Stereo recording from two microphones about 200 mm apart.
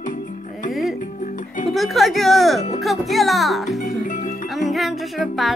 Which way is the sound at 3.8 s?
40° left (ahead or behind).